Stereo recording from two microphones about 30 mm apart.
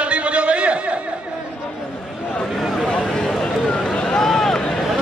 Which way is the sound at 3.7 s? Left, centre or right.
Left.